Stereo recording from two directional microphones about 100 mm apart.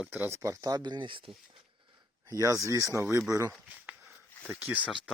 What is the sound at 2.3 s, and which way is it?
Speech, 35° right (ahead or behind).